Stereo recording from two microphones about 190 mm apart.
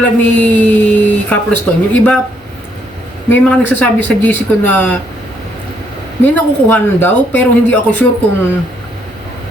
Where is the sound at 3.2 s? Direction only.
10° left (ahead or behind).